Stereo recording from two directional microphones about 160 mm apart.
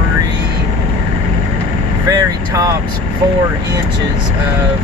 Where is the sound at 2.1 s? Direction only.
20° right (ahead or behind).